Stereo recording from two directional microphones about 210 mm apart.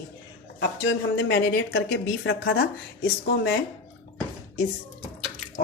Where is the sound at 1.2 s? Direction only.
60° left (ahead or behind).